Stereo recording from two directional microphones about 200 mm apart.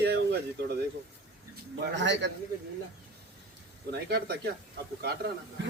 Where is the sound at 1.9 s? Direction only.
65° right (ahead or behind).